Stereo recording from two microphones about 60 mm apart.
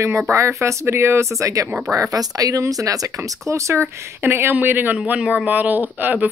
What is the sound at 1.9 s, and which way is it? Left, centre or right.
Speech, right.